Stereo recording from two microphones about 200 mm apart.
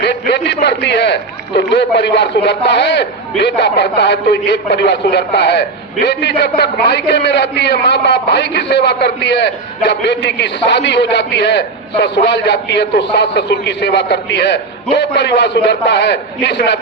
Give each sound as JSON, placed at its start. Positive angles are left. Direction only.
{"t": 0.0, "sound": "a man's voice", "side_deg": 55}